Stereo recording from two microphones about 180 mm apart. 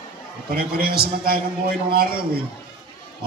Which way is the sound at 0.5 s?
55° right (ahead or behind).